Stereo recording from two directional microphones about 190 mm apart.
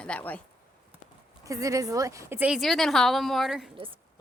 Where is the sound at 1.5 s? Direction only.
15° right (ahead or behind); by 3.7 s centre (ahead or behind).